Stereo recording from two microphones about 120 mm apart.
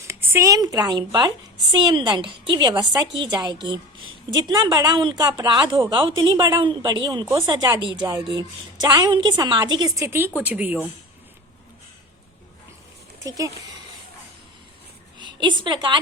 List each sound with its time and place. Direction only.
0.1 s a woman's voice: 20° right (ahead or behind)
13.2 s speech: 30° right (ahead or behind)
15.2 s a woman's voice: 40° right (ahead or behind)